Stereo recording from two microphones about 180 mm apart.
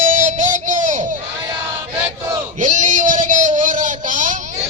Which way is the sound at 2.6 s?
45° right (ahead or behind).